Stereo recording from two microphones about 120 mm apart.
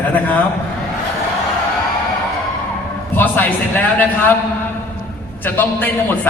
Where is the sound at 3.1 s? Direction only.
15° left (ahead or behind).